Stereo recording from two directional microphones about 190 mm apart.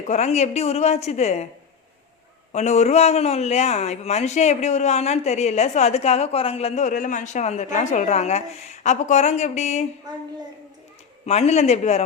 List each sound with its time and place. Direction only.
0.0 s a man's voice: 35° left (ahead or behind)
2.5 s a man's voice: 35° left (ahead or behind)
11.3 s a man's voice: 35° left (ahead or behind)